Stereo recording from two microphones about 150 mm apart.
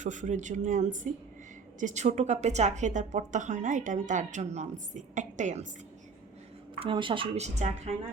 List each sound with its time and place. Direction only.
0.0 s speech: 55° right (ahead or behind)
6.7 s a woman's voice: 35° right (ahead or behind)